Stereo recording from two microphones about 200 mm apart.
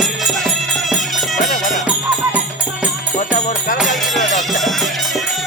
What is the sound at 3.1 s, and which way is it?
Music, 40° left (ahead or behind).